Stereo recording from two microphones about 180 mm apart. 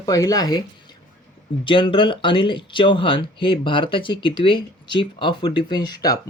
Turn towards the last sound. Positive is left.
turn(degrees=20)  # may be behind; listen again after turning